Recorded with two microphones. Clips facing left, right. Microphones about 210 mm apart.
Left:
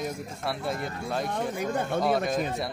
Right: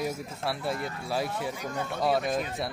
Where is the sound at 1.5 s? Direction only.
55° left (ahead or behind).